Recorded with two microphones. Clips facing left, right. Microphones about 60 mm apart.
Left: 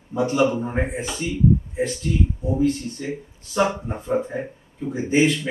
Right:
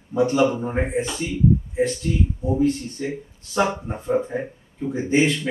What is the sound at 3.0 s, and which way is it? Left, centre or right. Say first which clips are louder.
Speech: right 1 dB; centre.